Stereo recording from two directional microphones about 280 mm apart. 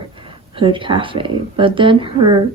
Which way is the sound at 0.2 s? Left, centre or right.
Centre.